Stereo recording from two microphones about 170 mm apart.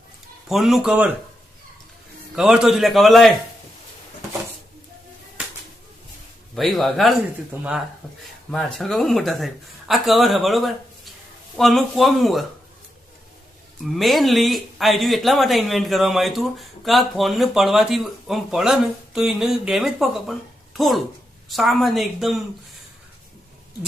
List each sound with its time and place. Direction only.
0.4 s speech: centre (ahead or behind)
2.3 s speech: 5° right (ahead or behind)
6.5 s speech: centre (ahead or behind)
8.2 s speech: 5° left (ahead or behind)
13.8 s speech: centre (ahead or behind)